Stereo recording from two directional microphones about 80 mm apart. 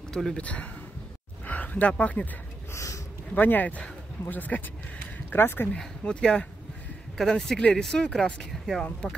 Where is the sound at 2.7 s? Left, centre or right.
Left.